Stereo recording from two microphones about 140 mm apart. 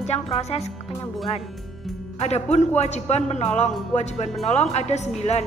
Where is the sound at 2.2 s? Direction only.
50° left (ahead or behind).